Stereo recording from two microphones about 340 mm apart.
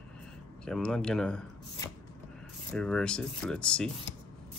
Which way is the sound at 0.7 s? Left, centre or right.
Centre.